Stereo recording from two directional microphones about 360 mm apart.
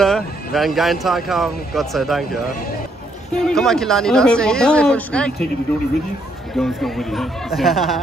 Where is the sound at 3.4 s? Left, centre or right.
Centre.